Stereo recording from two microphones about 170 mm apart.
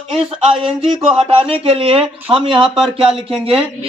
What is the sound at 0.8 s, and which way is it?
Speech, 35° right (ahead or behind).